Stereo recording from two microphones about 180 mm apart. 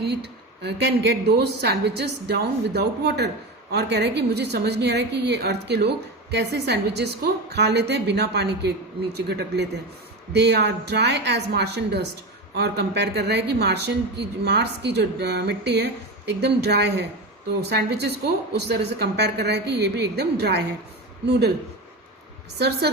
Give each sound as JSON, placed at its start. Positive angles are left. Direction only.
{"t": 0.0, "sound": "a woman's voice", "side_deg": -65}
{"t": 18.5, "sound": "a woman's voice", "side_deg": -65}
{"t": 22.5, "sound": "a woman's voice", "side_deg": -65}